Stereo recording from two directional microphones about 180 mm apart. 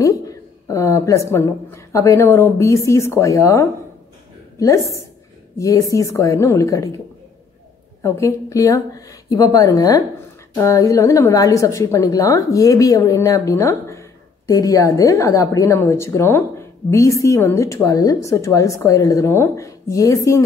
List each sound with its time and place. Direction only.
0.0 s a woman's voice: 20° left (ahead or behind)
8.0 s a woman's voice: 15° left (ahead or behind)